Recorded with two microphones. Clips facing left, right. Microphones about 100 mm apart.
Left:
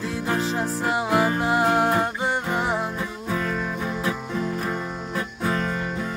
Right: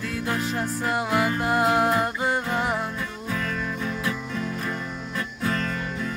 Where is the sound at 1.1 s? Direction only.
30° left (ahead or behind).